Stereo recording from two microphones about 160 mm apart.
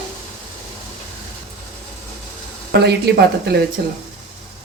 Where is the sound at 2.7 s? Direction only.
90° right.